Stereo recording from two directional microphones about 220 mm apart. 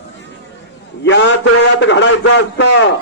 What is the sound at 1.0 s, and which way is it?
A man's voice, 55° left (ahead or behind).